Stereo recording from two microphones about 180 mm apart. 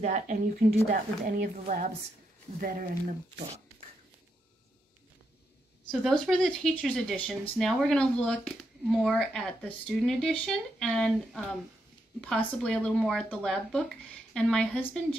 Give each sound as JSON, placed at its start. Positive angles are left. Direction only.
{"t": 0.0, "sound": "speech", "side_deg": -45}
{"t": 5.9, "sound": "speech", "side_deg": 0}